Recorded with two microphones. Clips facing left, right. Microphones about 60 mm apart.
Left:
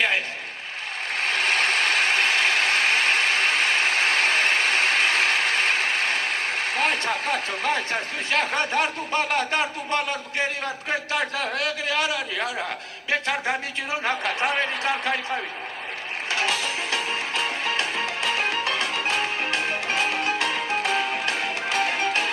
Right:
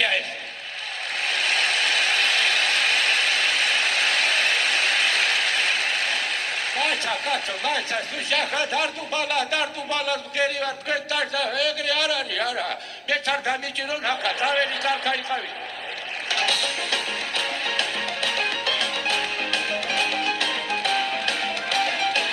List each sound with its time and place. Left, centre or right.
1.1 s a sound: left
13.1 s a man's voice: left
16.3 s music: left